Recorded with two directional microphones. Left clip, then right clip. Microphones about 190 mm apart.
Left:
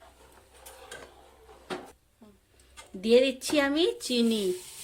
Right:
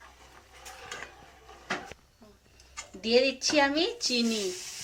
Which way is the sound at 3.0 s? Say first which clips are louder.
Left 2 dB; 50° left (ahead or behind).